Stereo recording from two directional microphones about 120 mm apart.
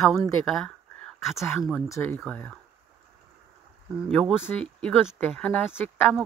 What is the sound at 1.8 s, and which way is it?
Speech, 20° left (ahead or behind).